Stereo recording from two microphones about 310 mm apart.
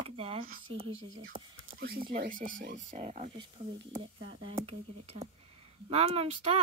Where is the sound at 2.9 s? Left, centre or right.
Right.